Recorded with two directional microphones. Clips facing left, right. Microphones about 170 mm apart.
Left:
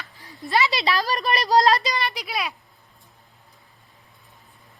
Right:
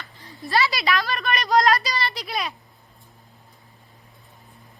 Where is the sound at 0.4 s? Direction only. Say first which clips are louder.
Even; 20° left (ahead or behind).